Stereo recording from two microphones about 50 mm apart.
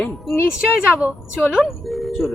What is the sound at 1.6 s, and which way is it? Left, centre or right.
Speech, centre.